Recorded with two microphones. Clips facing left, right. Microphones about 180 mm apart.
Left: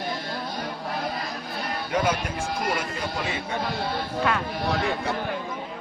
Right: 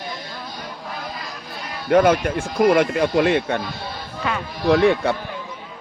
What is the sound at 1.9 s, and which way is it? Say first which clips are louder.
Speech: right 11 dB; 60° right (ahead or behind).